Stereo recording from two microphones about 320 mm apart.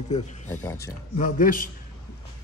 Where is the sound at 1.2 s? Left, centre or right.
Left.